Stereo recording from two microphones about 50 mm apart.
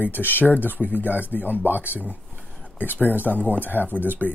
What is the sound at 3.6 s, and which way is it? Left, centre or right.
Speech, left.